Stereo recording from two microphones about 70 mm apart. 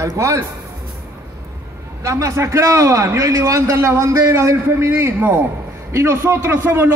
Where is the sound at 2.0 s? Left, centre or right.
Right.